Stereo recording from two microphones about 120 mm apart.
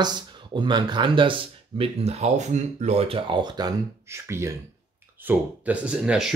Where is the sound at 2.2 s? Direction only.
70° right (ahead or behind); by 4.5 s 25° right (ahead or behind).